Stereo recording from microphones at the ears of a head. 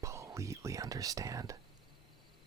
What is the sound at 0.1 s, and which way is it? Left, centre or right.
Speech, right.